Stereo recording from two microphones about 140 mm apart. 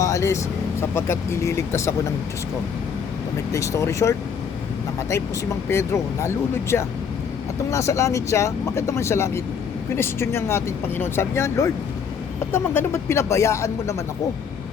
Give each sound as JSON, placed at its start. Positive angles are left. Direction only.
{"t": 0.0, "sound": "speech", "side_deg": 20}
{"t": 3.5, "sound": "speech", "side_deg": 20}
{"t": 5.6, "sound": "speech", "side_deg": 20}